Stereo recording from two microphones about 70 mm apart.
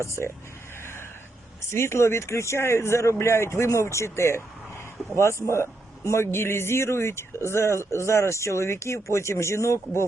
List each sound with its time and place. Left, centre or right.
0.0 s speech: left
1.7 s speech: left